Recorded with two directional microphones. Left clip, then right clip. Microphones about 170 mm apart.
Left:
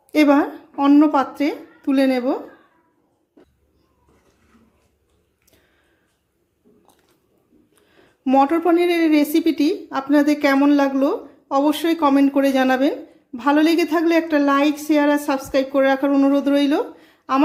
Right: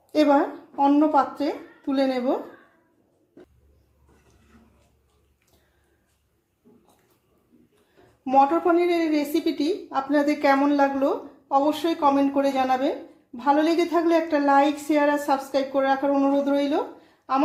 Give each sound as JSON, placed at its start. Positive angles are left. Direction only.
{"t": 0.1, "sound": "a woman's voice", "side_deg": 35}
{"t": 8.2, "sound": "a woman's voice", "side_deg": 45}